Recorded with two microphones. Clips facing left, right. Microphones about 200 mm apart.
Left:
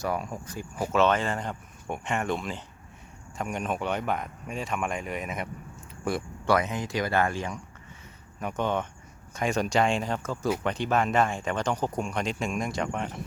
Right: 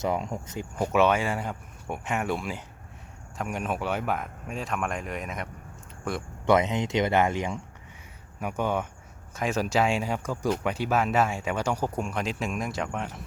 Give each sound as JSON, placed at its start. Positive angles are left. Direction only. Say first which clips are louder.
{"t": 0.0, "sound": "speech", "louder": "right 2 dB", "side_deg": -20}
{"t": 0.9, "sound": "speech", "louder": "right 1 dB", "side_deg": -10}
{"t": 6.4, "sound": "speech", "louder": "right 4 dB", "side_deg": -20}
{"t": 8.4, "sound": "speech", "louder": "even", "side_deg": -10}